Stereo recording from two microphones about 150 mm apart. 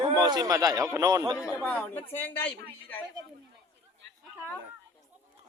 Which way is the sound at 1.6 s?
10° left (ahead or behind).